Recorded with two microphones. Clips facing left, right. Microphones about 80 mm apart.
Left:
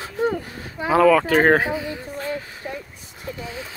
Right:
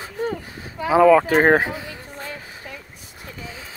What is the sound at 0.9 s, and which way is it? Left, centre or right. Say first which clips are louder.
Speech: right 2 dB; centre.